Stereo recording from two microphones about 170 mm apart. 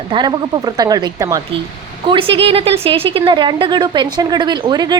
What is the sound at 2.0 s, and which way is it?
A woman's voice, 30° right (ahead or behind).